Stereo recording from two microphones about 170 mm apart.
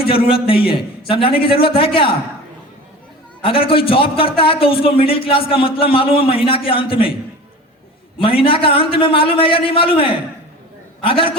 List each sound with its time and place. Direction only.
0.4 s a man's voice: 30° left (ahead or behind)
3.4 s a man's voice: 30° left (ahead or behind)
8.2 s a man's voice: 30° left (ahead or behind)